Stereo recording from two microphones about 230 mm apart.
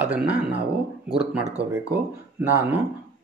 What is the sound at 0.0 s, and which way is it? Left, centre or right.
Speech, centre.